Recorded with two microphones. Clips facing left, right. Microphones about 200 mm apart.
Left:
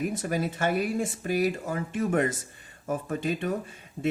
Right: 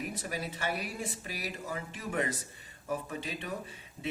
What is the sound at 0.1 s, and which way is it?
Speech, 45° left (ahead or behind).